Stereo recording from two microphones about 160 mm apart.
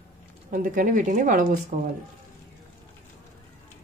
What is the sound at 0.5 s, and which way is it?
A woman's voice, 55° right (ahead or behind).